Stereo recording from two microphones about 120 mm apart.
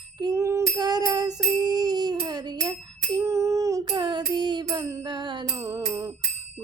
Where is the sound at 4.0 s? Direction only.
40° right (ahead or behind).